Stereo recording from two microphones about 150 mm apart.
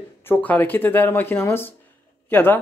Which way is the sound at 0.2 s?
10° left (ahead or behind).